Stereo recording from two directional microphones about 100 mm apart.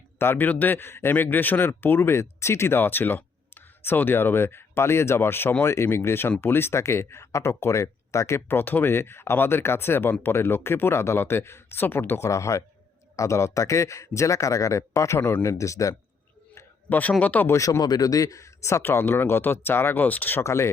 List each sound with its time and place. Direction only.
0.2 s speech: 20° left (ahead or behind)
16.6 s speech: 15° left (ahead or behind)
17.5 s speech: 35° left (ahead or behind); by 20.4 s 20° left (ahead or behind)
20.4 s speech: 30° left (ahead or behind)